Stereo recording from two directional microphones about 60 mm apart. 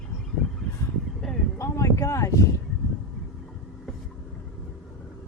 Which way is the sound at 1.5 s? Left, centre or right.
Left.